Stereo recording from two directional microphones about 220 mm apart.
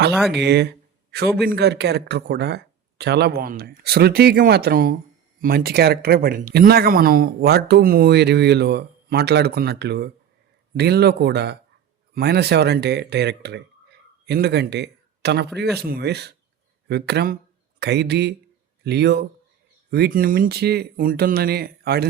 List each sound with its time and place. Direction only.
0.3 s speech: 50° right (ahead or behind)